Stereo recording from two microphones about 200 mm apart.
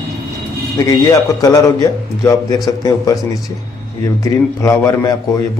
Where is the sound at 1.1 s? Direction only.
15° left (ahead or behind).